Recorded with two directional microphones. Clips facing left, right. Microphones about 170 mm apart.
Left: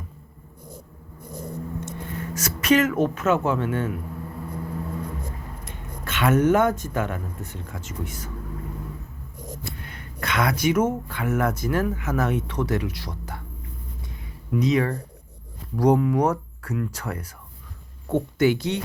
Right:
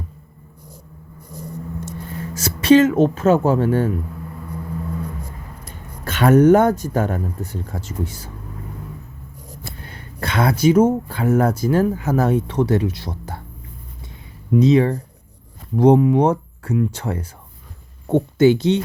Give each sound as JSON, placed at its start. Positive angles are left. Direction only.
{"t": 1.8, "sound": "speech", "side_deg": -30}
{"t": 5.6, "sound": "speech", "side_deg": -40}
{"t": 9.6, "sound": "speech", "side_deg": -30}
{"t": 14.5, "sound": "speech", "side_deg": -25}